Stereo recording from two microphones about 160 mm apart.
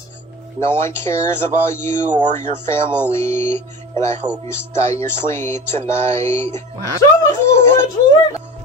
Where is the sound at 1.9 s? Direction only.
50° right (ahead or behind).